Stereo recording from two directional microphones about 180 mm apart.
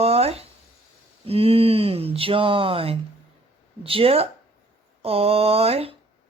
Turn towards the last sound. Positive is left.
turn(degrees=-35)  # may be behind; listen again after turning